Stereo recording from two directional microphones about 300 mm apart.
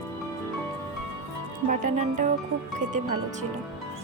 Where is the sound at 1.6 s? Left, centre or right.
Right.